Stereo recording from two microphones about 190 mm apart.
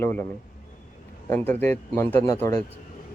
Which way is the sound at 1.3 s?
10° left (ahead or behind).